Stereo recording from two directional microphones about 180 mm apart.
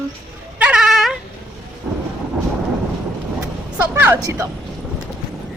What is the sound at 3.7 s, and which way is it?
Speech, 10° right (ahead or behind).